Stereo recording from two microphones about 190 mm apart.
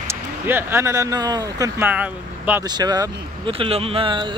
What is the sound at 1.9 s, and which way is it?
Speech, 10° right (ahead or behind).